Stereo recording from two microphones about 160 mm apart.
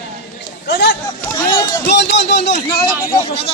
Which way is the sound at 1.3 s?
25° left (ahead or behind).